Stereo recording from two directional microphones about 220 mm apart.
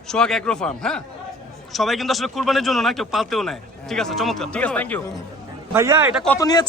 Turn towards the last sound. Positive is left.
turn(degrees=15)  # may be behind; listen again after turning